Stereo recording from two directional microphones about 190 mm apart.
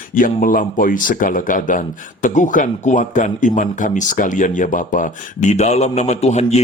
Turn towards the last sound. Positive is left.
turn(degrees=35)  # may be behind; listen again after turning